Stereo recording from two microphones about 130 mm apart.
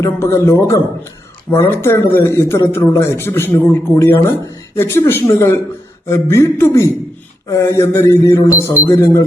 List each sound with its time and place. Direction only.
0.0 s a man's voice: 20° left (ahead or behind)